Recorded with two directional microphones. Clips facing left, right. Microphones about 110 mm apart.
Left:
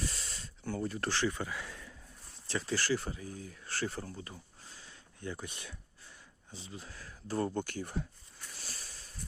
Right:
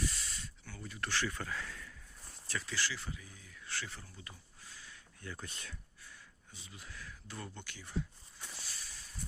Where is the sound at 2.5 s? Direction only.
30° left (ahead or behind).